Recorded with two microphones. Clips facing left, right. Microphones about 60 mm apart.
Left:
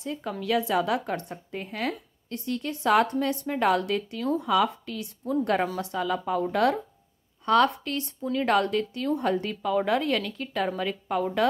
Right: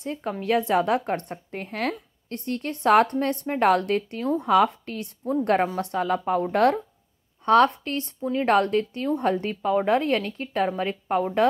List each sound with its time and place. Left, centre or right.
0.0 s a woman's voice: right